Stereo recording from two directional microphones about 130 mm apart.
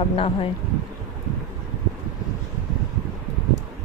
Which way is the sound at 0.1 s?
45° left (ahead or behind).